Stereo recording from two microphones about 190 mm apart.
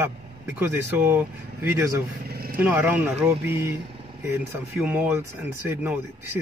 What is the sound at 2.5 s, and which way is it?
Speech, 10° right (ahead or behind).